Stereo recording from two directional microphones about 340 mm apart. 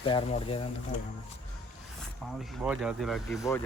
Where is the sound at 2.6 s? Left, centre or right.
Centre.